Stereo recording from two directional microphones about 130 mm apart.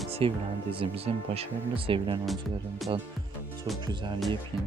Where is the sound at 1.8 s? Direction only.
40° right (ahead or behind).